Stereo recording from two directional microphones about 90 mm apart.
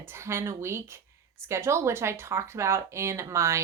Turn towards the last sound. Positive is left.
turn(degrees=-30)  # may be behind; listen again after turning